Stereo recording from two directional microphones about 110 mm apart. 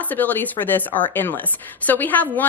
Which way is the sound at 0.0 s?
15° left (ahead or behind).